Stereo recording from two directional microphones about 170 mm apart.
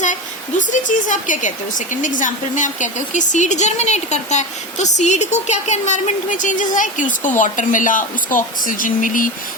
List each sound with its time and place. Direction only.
0.0 s speech: 45° left (ahead or behind)